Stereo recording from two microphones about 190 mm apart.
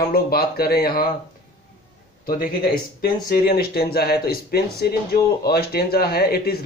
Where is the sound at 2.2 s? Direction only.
50° left (ahead or behind).